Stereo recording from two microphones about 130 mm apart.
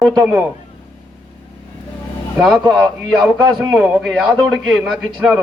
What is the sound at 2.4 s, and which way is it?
Speech, 5° left (ahead or behind).